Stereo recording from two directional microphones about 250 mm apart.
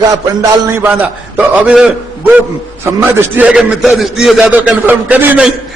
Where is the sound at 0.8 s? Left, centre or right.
Centre.